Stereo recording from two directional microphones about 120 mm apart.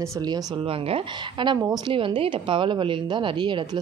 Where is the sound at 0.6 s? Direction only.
55° right (ahead or behind).